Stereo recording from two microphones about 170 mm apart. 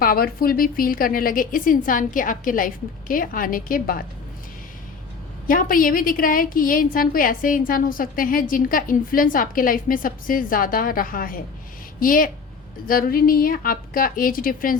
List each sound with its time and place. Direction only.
0.0 s a woman's voice: 60° left (ahead or behind)
5.5 s a woman's voice: 55° left (ahead or behind)